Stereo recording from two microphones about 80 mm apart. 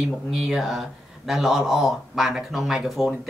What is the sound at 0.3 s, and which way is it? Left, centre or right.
Speech, centre.